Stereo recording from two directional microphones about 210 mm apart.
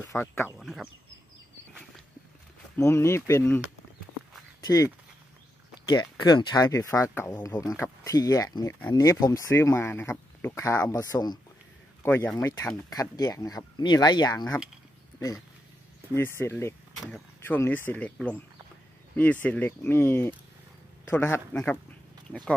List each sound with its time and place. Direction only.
0.0 s speech: 10° left (ahead or behind)
0.6 s speech: centre (ahead or behind)
2.8 s speech: 15° left (ahead or behind)
4.6 s speech: 15° left (ahead or behind)
19.4 s speech: 10° left (ahead or behind)